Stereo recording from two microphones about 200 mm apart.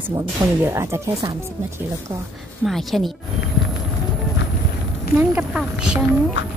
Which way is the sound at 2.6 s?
Centre (ahead or behind).